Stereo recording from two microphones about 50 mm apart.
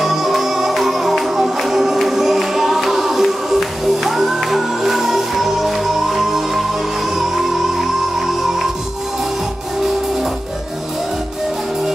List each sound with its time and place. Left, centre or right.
0.0 s music: centre